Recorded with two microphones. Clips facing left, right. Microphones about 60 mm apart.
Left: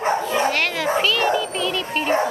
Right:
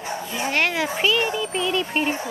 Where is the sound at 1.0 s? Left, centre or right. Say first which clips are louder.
Even; centre.